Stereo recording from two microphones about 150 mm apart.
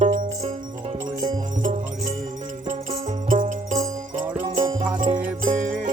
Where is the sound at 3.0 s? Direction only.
55° right (ahead or behind).